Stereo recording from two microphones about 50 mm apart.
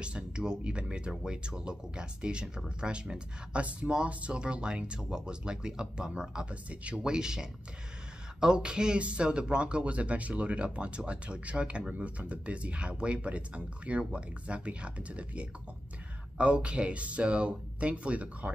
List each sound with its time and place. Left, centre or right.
0.0 s speech: centre
6.5 s speech: right
7.0 s speech: centre